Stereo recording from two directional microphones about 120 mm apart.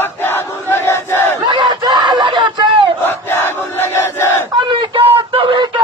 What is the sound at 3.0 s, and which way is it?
Battle cry, 20° left (ahead or behind).